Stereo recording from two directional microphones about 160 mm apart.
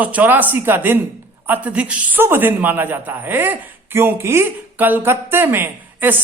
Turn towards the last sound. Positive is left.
turn(degrees=-15)  # may be behind; listen again after turning